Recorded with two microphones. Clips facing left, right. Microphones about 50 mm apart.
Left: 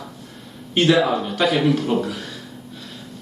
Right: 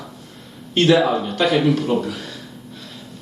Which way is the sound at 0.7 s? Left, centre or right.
Centre.